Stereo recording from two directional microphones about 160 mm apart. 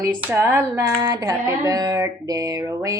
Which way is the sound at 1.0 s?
20° right (ahead or behind).